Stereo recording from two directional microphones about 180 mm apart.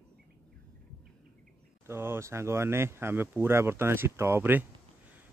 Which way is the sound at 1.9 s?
15° right (ahead or behind).